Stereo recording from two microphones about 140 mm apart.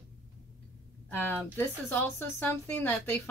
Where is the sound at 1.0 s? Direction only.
15° left (ahead or behind).